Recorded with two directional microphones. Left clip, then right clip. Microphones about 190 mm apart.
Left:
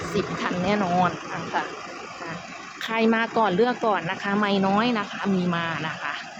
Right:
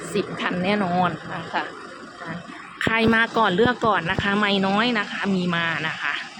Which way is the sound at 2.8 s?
Centre (ahead or behind).